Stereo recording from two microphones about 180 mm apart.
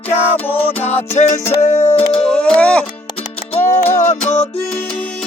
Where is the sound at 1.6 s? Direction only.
45° left (ahead or behind).